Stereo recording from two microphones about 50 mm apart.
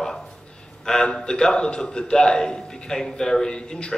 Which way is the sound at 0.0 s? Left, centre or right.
Centre.